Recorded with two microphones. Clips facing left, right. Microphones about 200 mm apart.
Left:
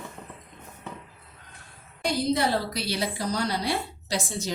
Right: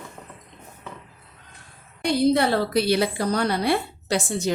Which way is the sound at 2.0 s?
60° right (ahead or behind).